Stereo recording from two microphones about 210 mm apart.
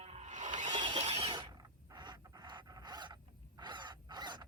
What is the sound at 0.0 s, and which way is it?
Music, 30° right (ahead or behind).